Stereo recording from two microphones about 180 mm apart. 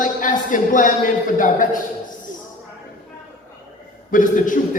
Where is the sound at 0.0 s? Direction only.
45° left (ahead or behind).